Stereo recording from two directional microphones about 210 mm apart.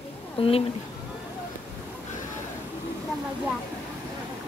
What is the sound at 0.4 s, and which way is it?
Speech, 25° left (ahead or behind).